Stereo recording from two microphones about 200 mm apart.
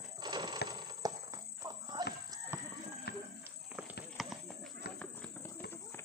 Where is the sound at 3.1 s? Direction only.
55° left (ahead or behind).